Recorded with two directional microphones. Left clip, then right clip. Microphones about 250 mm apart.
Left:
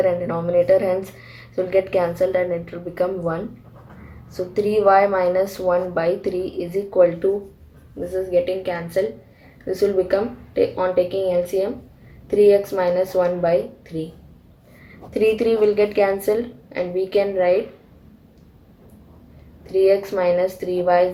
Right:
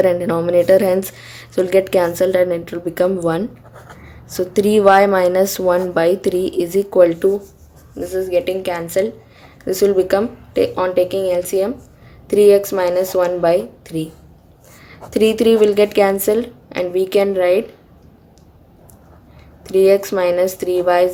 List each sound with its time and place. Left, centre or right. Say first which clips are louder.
0.0 s speech: right 5 dB; right
7.9 s a woman's voice: right 2 dB; right
15.1 s a woman's voice: right 5 dB; right
19.6 s a woman's voice: right 4 dB; right